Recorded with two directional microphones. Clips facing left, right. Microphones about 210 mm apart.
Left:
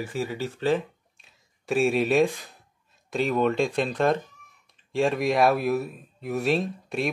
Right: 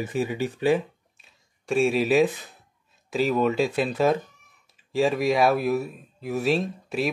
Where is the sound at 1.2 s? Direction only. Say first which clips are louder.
Even; centre (ahead or behind).